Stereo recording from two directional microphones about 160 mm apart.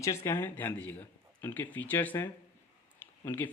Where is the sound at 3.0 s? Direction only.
15° left (ahead or behind).